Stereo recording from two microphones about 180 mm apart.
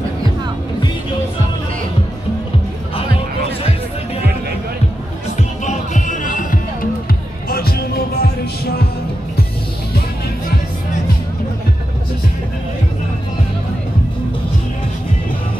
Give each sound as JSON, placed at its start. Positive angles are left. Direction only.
{"t": 5.7, "sound": "music", "side_deg": 45}